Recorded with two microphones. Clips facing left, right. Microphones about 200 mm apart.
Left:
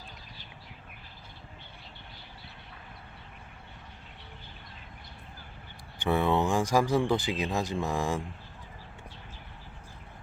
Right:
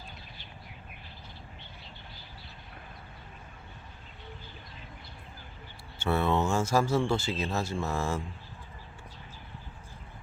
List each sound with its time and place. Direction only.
6.0 s speech: 15° left (ahead or behind)